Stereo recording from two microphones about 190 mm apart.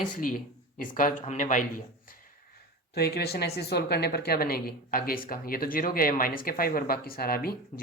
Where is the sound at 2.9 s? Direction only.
55° left (ahead or behind).